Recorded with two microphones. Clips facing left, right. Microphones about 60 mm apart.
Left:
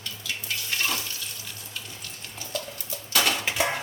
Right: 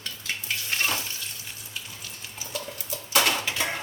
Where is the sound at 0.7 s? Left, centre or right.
Right.